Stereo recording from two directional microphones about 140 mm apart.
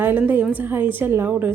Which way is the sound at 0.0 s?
15° right (ahead or behind).